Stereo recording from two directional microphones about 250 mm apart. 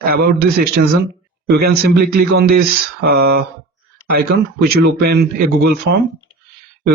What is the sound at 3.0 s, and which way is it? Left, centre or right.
Speech, right.